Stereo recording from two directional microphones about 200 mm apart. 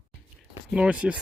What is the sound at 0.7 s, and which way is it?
Speech, 5° right (ahead or behind).